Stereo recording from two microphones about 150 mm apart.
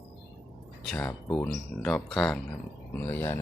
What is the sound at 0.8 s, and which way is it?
Speech, 10° left (ahead or behind).